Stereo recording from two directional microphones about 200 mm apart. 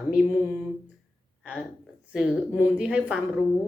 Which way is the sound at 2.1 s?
5° right (ahead or behind).